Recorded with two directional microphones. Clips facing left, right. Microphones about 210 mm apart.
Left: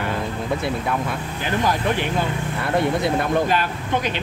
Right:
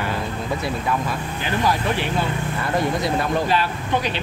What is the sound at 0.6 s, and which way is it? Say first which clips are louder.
Speech: even; 60° left (ahead or behind).